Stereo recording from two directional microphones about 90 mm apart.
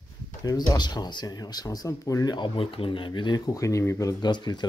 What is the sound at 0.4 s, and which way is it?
Speech, 45° left (ahead or behind).